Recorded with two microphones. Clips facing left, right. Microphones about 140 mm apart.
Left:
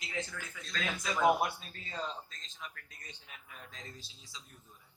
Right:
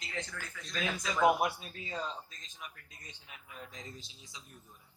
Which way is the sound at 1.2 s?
15° right (ahead or behind).